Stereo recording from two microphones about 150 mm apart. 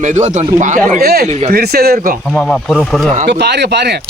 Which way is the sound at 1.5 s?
90° right.